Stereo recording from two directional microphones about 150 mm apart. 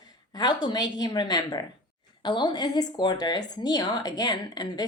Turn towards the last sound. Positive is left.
turn(degrees=25)  # may be behind; listen again after turning